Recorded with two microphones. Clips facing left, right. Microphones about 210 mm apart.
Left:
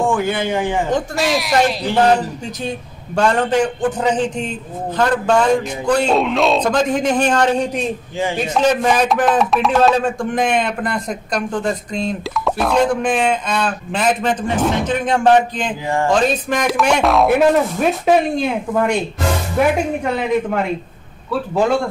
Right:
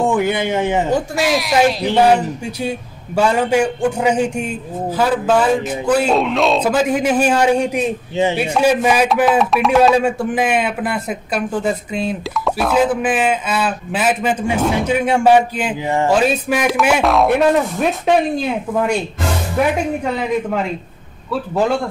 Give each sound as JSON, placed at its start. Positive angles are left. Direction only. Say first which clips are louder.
{"t": 0.0, "sound": "a man's voice", "louder": "right 1 dB", "side_deg": -20}
{"t": 0.8, "sound": "speech", "louder": "right 1 dB", "side_deg": -5}